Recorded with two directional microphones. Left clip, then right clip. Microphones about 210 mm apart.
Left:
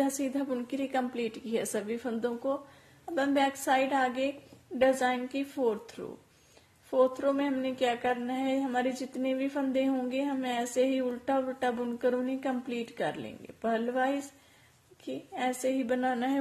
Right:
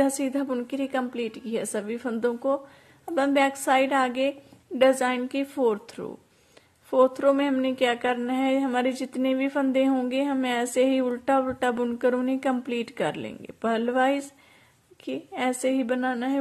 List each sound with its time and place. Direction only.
0.0 s a woman's voice: 30° right (ahead or behind)
4.7 s a sound: 30° right (ahead or behind)
15.0 s a woman's voice: 30° right (ahead or behind)